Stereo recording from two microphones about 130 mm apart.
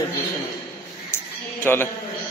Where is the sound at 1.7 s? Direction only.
15° left (ahead or behind).